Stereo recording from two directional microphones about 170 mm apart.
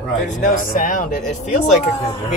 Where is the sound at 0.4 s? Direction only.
50° left (ahead or behind).